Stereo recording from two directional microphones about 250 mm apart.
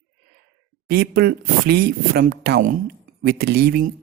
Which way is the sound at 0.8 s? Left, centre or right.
Right.